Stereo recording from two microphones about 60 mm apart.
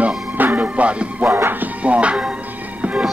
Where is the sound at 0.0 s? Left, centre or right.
Right.